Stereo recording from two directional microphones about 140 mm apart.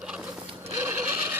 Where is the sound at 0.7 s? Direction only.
15° right (ahead or behind).